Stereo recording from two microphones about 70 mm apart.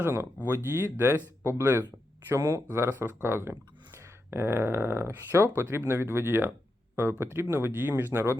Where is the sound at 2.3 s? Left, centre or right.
Right.